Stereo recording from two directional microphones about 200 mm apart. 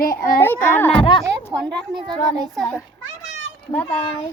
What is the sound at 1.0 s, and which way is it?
Speech, 25° left (ahead or behind).